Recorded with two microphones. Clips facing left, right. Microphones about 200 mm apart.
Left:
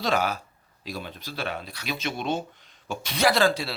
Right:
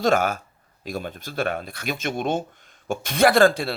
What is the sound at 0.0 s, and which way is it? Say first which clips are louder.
Speech: right 5 dB; 50° right (ahead or behind).